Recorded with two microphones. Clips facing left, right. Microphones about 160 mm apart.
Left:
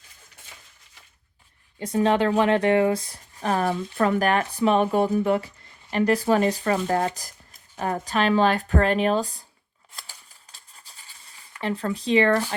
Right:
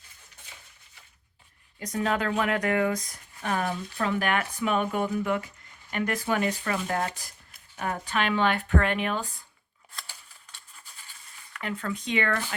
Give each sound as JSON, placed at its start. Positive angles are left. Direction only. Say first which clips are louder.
{"t": 1.8, "sound": "speech", "louder": "left 7 dB", "side_deg": 30}
{"t": 3.7, "sound": "speech", "louder": "left 6 dB", "side_deg": 50}
{"t": 11.5, "sound": "speech", "louder": "left 5 dB", "side_deg": 30}